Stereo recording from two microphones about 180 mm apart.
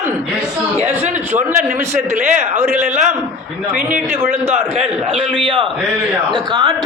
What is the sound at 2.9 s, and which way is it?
Speech, 40° right (ahead or behind).